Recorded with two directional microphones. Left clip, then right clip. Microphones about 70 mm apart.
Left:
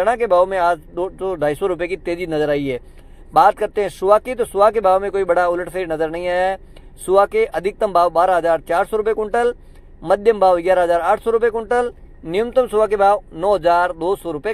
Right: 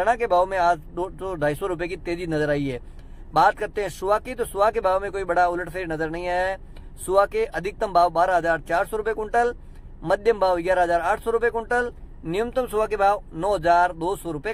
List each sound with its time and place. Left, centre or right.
0.0 s speech: left